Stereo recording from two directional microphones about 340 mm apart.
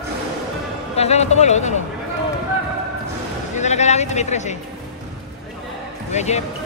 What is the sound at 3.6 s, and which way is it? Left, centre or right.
Speech, centre.